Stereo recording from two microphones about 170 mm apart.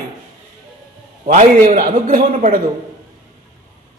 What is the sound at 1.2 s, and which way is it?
A man's voice, 45° right (ahead or behind).